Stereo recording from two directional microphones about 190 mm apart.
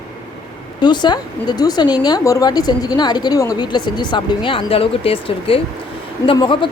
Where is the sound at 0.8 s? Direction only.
25° left (ahead or behind).